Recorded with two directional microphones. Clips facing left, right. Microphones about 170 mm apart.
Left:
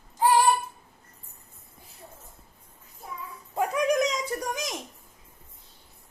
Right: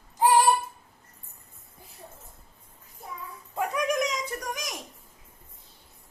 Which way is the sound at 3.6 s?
30° left (ahead or behind).